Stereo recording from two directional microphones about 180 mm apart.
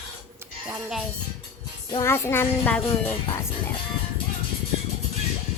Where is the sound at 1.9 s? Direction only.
15° left (ahead or behind).